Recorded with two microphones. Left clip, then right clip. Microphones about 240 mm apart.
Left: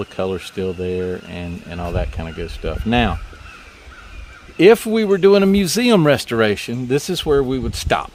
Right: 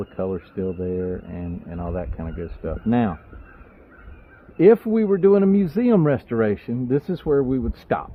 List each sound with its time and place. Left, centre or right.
0.0 s speech: left
4.5 s speech: left